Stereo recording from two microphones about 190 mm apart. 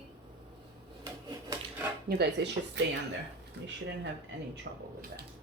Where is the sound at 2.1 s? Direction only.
60° right (ahead or behind).